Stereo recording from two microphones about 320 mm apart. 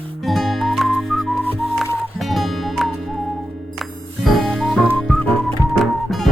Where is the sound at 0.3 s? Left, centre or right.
Centre.